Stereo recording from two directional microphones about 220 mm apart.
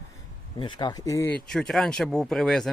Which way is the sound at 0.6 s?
20° left (ahead or behind).